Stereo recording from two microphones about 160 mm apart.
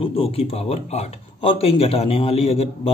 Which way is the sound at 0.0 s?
35° left (ahead or behind).